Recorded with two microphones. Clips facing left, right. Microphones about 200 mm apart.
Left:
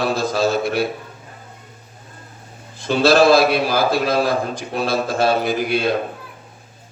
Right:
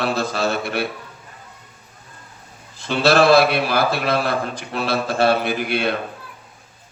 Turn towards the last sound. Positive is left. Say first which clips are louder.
# left 2 dB
turn(degrees=-60)  # may be behind; listen again after turning